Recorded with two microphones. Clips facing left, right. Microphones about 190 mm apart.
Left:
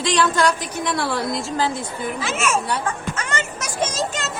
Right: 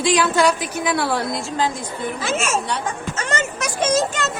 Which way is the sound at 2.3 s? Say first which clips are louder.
Even; 30° right (ahead or behind).